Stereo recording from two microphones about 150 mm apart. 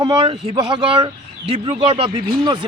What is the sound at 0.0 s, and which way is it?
A man's voice, 35° right (ahead or behind).